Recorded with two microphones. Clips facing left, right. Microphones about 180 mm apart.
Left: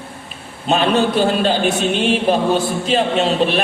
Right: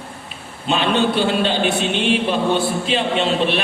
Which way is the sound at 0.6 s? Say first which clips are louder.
Left 2 dB; 40° left (ahead or behind).